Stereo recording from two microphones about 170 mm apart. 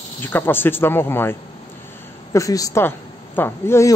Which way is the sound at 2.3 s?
20° left (ahead or behind).